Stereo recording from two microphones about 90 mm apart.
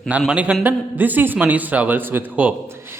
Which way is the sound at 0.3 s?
15° right (ahead or behind).